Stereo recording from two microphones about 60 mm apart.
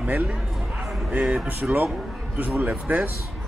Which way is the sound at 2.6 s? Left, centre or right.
Right.